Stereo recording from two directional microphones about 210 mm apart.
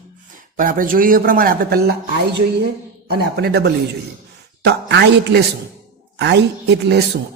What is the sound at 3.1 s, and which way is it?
Speech, 50° right (ahead or behind).